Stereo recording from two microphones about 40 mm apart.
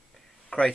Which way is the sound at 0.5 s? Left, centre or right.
Left.